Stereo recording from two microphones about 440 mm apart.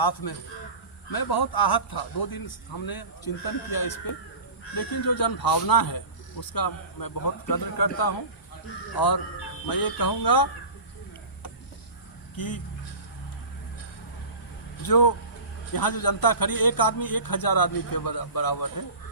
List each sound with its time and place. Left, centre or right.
0.0 s a man's voice: left
14.8 s a man's voice: left